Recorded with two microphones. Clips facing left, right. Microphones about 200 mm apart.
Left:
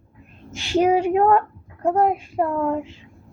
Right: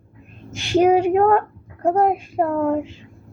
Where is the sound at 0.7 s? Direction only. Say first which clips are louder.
Right 3 dB; 45° right (ahead or behind).